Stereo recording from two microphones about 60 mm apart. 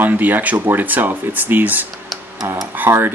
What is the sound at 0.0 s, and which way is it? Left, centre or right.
Speech, right.